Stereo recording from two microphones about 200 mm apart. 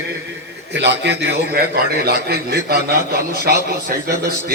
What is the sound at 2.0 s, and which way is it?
Speech, 50° right (ahead or behind).